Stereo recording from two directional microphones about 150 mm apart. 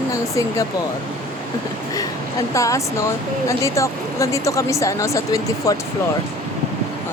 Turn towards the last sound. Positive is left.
turn(degrees=20)  # may be behind; listen again after turning